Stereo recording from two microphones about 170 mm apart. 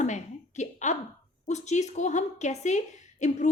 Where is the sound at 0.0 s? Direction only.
45° left (ahead or behind).